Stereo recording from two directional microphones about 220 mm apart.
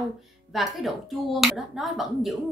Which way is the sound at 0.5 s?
Centre (ahead or behind).